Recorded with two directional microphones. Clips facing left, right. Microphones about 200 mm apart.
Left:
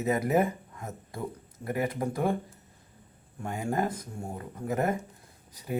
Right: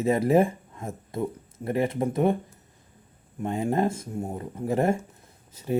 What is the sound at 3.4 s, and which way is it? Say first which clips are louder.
Speech: right 5 dB; 25° right (ahead or behind).